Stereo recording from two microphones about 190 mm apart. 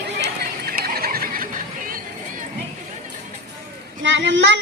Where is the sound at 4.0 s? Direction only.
70° right (ahead or behind).